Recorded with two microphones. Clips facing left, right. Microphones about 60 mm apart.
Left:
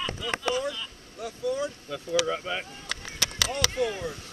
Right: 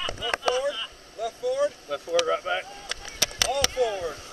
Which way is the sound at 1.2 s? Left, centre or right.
Right.